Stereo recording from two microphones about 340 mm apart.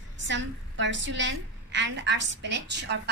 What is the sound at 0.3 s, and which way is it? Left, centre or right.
A woman's voice, right.